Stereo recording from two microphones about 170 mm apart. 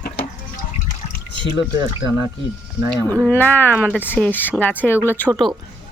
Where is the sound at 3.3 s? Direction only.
10° left (ahead or behind).